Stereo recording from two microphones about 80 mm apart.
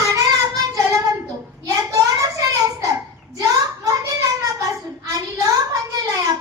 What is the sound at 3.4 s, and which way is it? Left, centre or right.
Child singing, right.